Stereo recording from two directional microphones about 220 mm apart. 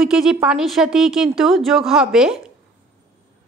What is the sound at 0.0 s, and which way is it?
A woman's voice, centre (ahead or behind).